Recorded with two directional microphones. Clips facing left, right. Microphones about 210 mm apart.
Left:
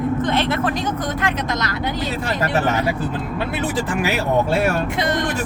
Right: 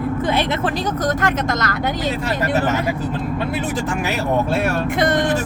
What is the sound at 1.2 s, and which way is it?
Speech, 50° right (ahead or behind).